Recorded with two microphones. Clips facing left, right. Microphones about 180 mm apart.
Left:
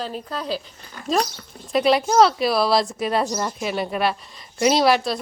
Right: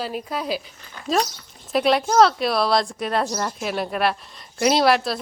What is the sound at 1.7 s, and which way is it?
A woman's voice, centre (ahead or behind).